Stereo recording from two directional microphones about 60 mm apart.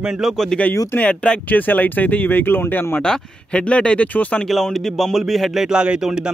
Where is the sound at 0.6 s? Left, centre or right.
Left.